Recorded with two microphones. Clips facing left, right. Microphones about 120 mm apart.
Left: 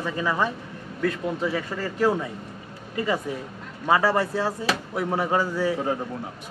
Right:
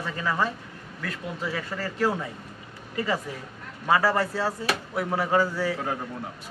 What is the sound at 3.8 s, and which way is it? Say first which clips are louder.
A man's voice: left 2 dB; 20° left (ahead or behind).